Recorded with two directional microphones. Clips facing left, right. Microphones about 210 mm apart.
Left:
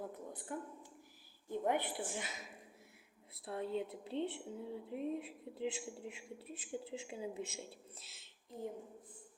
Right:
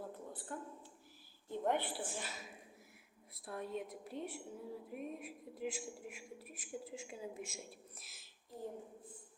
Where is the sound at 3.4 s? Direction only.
25° left (ahead or behind).